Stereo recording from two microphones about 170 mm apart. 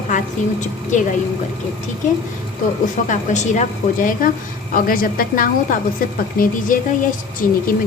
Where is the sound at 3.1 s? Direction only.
45° left (ahead or behind).